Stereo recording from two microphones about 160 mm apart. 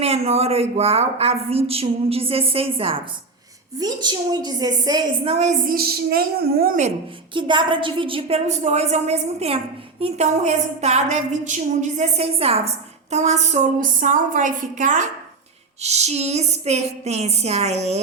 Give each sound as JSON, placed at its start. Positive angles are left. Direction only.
{"t": 0.0, "sound": "a woman's voice", "side_deg": -40}
{"t": 3.8, "sound": "a woman's voice", "side_deg": -25}
{"t": 5.3, "sound": "a woman's voice", "side_deg": -45}
{"t": 5.7, "sound": "a woman's voice", "side_deg": -75}
{"t": 7.3, "sound": "a woman's voice", "side_deg": -30}